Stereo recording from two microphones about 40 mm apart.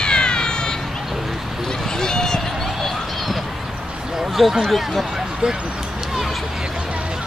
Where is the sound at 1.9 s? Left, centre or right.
Centre.